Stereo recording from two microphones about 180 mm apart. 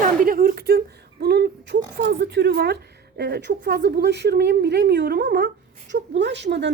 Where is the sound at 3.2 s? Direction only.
65° right (ahead or behind).